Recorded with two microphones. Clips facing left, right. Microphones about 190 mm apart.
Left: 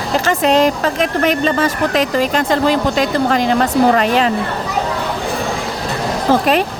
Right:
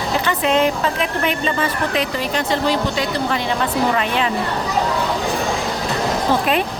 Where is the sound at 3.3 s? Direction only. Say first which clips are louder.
Left 6 dB; 45° left (ahead or behind).